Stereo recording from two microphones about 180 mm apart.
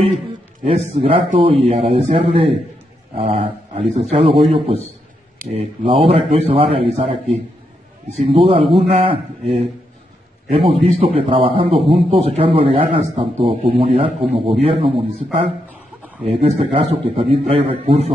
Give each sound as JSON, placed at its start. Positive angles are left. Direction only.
{"t": 0.9, "sound": "a man's voice", "side_deg": -35}
{"t": 16.3, "sound": "a man's voice", "side_deg": -35}